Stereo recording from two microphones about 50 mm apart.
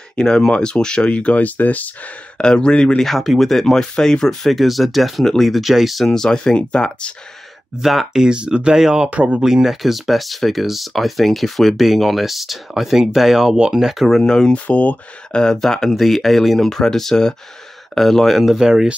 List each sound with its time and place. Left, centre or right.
0.1 s speech: centre; by 1.9 s left
2.3 s speech: centre
3.0 s speech: centre
6.0 s speech: centre
7.8 s speech: centre
8.1 s speech: centre
9.1 s speech: right
9.4 s speech: centre
14.2 s speech: centre
14.5 s speech: left
15.3 s speech: centre
18.4 s speech: centre